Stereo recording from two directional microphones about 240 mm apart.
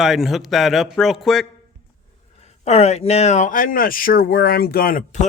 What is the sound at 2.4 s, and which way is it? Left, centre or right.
Speech, left.